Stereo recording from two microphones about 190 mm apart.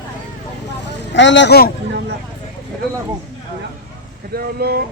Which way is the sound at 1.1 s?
70° left (ahead or behind).